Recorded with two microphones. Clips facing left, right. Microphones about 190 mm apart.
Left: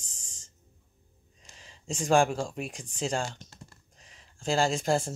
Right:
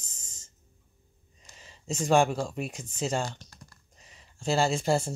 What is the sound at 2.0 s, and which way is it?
Speech, centre (ahead or behind).